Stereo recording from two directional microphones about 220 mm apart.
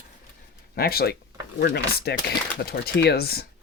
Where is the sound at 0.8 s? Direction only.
45° left (ahead or behind).